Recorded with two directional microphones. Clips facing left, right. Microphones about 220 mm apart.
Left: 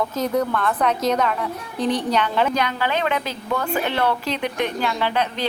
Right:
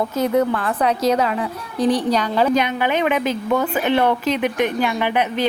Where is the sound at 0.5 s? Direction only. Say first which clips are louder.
Right 1 dB; 30° right (ahead or behind).